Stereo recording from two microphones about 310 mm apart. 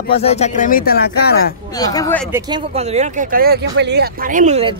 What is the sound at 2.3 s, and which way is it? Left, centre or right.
Speech, centre.